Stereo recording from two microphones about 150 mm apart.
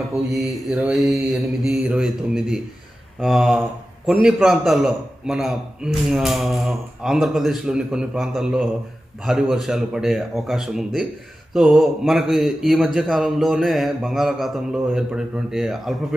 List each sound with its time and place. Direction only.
0.1 s a man's voice: centre (ahead or behind)